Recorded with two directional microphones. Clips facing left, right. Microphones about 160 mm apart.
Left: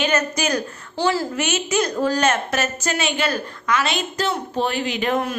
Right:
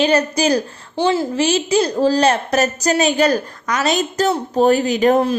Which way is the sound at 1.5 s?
30° right (ahead or behind).